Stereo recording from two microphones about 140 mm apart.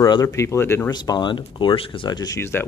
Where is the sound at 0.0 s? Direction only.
25° left (ahead or behind).